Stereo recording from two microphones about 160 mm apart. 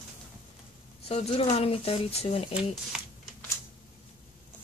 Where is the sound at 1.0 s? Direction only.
40° left (ahead or behind).